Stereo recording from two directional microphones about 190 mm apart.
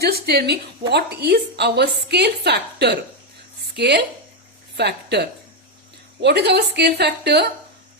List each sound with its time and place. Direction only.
0.0 s a woman's voice: 55° right (ahead or behind)